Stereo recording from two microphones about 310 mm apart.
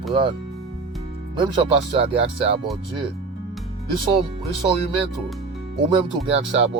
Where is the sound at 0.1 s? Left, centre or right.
Centre.